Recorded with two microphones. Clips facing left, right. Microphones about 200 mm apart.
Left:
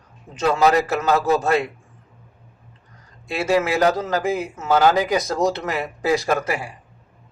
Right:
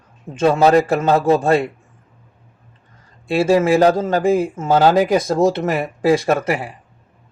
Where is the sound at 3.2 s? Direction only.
30° right (ahead or behind).